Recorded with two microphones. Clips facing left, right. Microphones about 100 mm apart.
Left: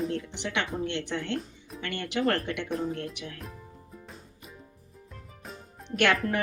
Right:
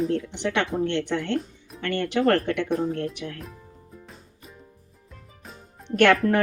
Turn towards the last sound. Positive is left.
turn(degrees=-45)  # may be behind; listen again after turning